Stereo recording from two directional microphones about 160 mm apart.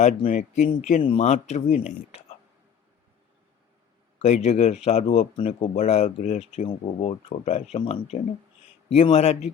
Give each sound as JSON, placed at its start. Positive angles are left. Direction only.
{"t": 0.3, "sound": "speech", "side_deg": 50}
{"t": 4.2, "sound": "speech", "side_deg": 45}
{"t": 7.8, "sound": "speech", "side_deg": 30}